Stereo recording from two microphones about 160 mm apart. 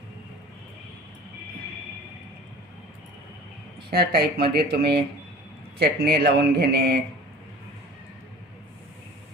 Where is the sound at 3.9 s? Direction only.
75° right (ahead or behind).